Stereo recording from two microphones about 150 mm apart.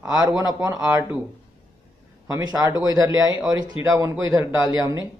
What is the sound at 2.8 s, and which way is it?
Speech, 25° right (ahead or behind).